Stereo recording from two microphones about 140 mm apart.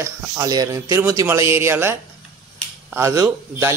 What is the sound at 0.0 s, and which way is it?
Speech, 25° right (ahead or behind).